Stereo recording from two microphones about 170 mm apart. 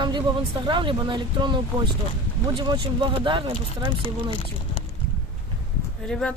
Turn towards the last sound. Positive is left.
turn(degrees=5)  # may be behind; listen again after turning